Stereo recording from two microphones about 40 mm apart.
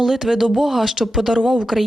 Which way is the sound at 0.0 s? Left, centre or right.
Centre.